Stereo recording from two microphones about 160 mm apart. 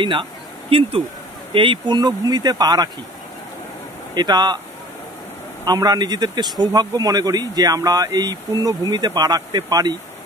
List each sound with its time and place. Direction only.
0.0 s speech: 30° right (ahead or behind)
4.1 s speech: 25° right (ahead or behind)
5.7 s speech: 25° right (ahead or behind)